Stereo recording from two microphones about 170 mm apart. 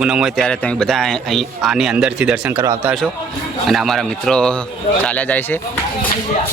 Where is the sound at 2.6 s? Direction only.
20° right (ahead or behind).